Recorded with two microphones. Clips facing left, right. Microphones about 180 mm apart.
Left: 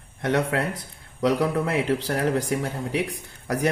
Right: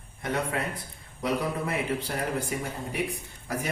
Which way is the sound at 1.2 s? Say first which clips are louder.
Left 7 dB; 90° left.